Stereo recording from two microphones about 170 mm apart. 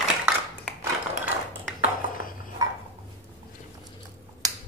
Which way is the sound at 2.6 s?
20° right (ahead or behind).